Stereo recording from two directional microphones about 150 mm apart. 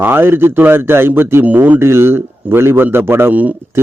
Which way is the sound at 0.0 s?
15° right (ahead or behind).